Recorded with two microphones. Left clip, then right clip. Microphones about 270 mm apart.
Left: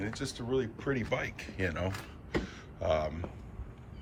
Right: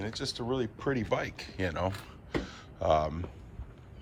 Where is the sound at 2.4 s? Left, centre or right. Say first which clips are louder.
Right 6 dB; centre.